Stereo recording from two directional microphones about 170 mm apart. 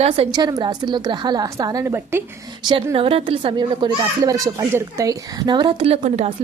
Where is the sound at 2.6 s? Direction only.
25° right (ahead or behind).